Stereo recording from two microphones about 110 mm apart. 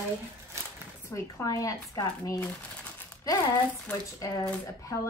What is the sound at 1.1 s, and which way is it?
A woman's voice, 25° left (ahead or behind).